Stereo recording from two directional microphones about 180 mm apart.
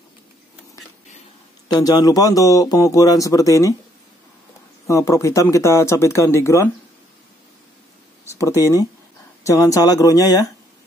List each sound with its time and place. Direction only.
1.7 s a man's voice: 20° left (ahead or behind)
4.8 s speech: 15° left (ahead or behind)
8.3 s a sound: 15° left (ahead or behind)
9.4 s speech: 15° left (ahead or behind)